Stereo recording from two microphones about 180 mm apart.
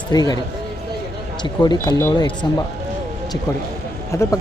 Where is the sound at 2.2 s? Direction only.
25° left (ahead or behind).